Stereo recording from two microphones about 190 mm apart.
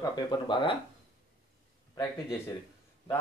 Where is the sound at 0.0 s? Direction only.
20° left (ahead or behind).